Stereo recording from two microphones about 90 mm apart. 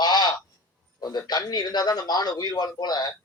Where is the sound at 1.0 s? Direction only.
50° left (ahead or behind).